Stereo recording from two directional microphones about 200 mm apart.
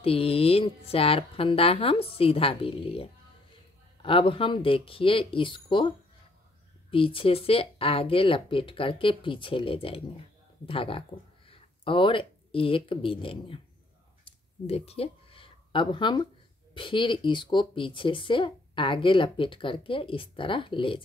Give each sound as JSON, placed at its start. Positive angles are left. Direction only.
{"t": 0.0, "sound": "speech", "side_deg": 30}
{"t": 6.9, "sound": "speech", "side_deg": 25}
{"t": 14.7, "sound": "speech", "side_deg": 30}